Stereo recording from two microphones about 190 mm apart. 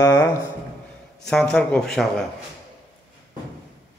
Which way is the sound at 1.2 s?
5° left (ahead or behind).